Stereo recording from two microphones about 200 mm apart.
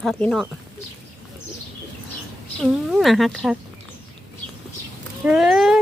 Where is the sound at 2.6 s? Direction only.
Centre (ahead or behind).